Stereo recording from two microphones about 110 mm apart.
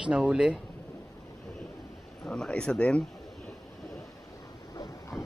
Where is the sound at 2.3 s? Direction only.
10° left (ahead or behind).